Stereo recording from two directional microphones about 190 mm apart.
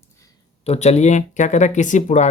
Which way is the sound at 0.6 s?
35° left (ahead or behind).